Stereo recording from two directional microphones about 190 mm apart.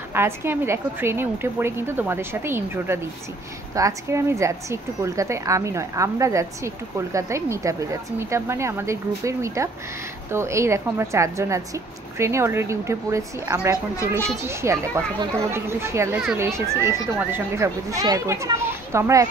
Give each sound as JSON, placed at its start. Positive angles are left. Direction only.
{"t": 0.1, "sound": "a woman's voice", "side_deg": -10}